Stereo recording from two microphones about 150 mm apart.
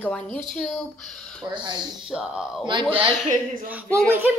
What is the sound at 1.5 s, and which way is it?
Speech, 30° right (ahead or behind).